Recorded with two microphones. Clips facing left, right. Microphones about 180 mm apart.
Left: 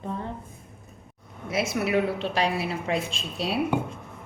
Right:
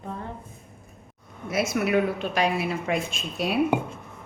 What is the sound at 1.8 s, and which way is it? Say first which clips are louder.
A woman's voice: right 1 dB; 30° left (ahead or behind).